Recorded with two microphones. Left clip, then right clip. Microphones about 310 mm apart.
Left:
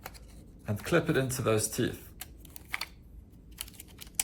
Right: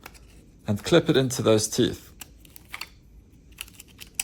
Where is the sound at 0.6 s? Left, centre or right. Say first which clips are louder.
Right 8 dB; centre.